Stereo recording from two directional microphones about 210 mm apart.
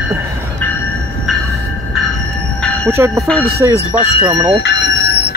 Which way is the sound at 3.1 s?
5° left (ahead or behind).